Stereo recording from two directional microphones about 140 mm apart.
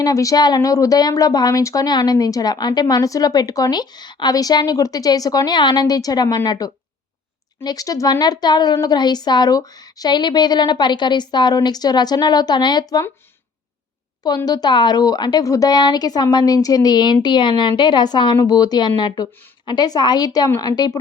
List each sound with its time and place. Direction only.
0.0 s a woman's voice: 25° left (ahead or behind)
14.3 s a woman's voice: 30° left (ahead or behind)